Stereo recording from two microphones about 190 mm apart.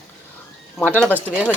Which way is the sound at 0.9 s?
10° left (ahead or behind).